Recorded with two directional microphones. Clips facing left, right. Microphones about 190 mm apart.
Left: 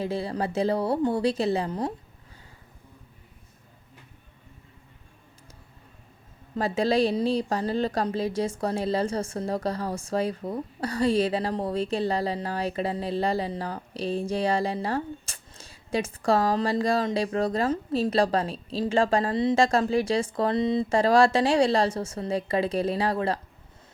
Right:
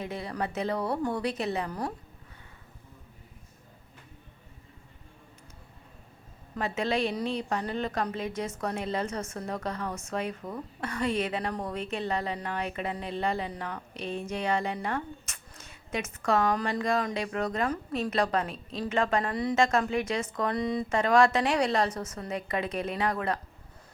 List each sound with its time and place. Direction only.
0.0 s a woman's voice: 30° left (ahead or behind)
6.6 s a woman's voice: 35° left (ahead or behind)